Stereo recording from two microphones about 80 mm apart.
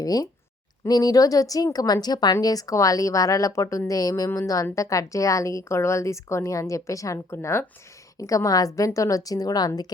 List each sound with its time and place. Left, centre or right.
0.0 s a woman's voice: left
7.3 s a woman's voice: left
8.2 s a woman's voice: left